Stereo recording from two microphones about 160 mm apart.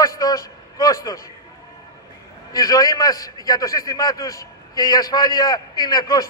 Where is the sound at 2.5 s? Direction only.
25° left (ahead or behind).